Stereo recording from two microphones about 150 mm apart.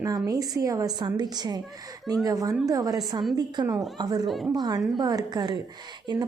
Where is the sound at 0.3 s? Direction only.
25° right (ahead or behind).